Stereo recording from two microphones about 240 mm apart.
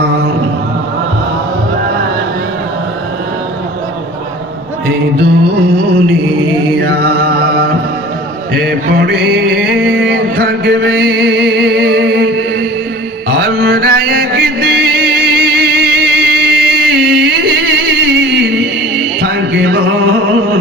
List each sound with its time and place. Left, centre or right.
5.6 s music: right
6.7 s mantra: right
8.5 s a sound: right
13.3 s mantra: right
19.2 s music: right